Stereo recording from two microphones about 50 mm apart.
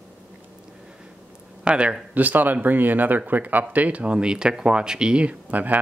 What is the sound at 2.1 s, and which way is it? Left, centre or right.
Speech, right.